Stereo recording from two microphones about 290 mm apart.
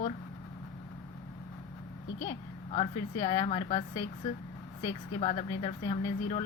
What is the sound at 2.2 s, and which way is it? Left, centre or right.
Speech, centre.